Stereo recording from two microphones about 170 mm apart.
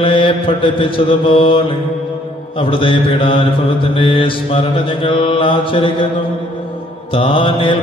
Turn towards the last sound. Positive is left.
turn(degrees=30)  # may be behind; listen again after turning